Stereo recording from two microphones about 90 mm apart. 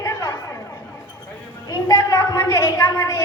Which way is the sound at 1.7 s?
40° left (ahead or behind).